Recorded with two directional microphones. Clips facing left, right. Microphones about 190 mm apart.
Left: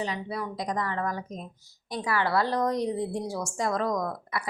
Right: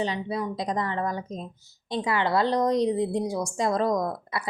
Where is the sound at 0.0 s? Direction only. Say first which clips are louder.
Right 4 dB; 25° right (ahead or behind).